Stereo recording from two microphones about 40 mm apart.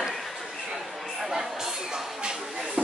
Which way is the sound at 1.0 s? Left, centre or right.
Centre.